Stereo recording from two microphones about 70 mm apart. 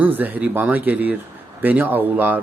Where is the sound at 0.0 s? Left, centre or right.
Right.